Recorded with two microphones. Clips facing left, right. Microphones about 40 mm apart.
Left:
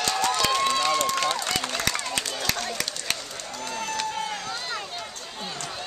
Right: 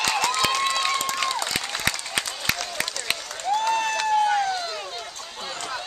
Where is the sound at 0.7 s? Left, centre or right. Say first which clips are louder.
Left 1 dB; centre.